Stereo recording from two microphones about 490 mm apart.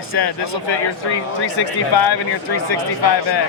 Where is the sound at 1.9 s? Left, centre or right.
Left.